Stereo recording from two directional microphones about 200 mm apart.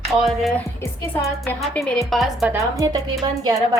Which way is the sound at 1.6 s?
Centre (ahead or behind).